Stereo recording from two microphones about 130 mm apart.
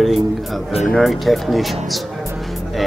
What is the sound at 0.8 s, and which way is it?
Speech, centre (ahead or behind).